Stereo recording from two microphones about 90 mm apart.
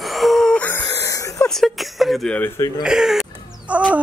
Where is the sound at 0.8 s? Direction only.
40° left (ahead or behind).